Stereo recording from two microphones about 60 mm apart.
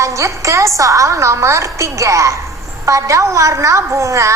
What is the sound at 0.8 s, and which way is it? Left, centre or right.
A woman's voice, right.